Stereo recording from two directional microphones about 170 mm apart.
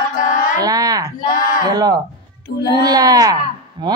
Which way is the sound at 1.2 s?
55° left (ahead or behind).